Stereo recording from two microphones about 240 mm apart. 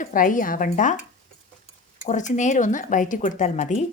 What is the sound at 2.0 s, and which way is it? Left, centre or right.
Speech, left.